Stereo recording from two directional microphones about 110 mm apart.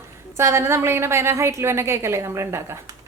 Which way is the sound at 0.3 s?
25° right (ahead or behind).